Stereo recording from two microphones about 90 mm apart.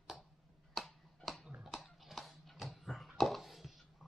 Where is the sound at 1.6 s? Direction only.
Centre (ahead or behind).